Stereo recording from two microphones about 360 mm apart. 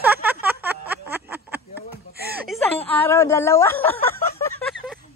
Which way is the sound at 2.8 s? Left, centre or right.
Centre.